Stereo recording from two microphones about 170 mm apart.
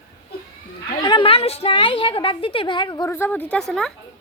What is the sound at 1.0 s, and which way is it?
A woman's voice, 30° left (ahead or behind).